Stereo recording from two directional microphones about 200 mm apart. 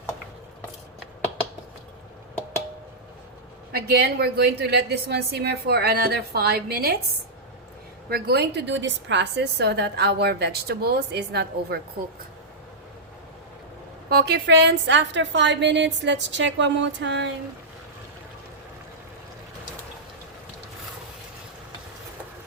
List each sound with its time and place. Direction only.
3.7 s a woman's voice: 50° right (ahead or behind)
8.1 s a woman's voice: 55° right (ahead or behind)
14.1 s a woman's voice: 50° right (ahead or behind)